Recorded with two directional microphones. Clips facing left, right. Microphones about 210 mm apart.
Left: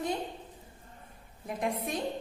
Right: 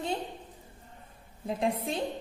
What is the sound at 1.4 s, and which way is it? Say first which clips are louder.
Speech: right 3 dB; 30° right (ahead or behind).